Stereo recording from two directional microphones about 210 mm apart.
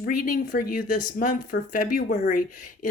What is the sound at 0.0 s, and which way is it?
Speech, 40° left (ahead or behind).